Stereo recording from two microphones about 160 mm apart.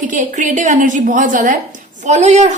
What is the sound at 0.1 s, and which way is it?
A woman's voice, 50° right (ahead or behind).